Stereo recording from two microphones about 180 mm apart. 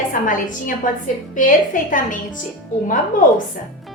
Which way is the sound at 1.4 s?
45° left (ahead or behind).